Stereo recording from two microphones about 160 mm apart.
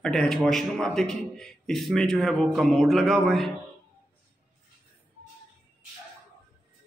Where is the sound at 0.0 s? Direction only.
5° left (ahead or behind).